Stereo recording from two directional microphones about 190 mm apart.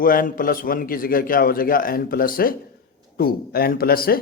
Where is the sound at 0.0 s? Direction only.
50° left (ahead or behind).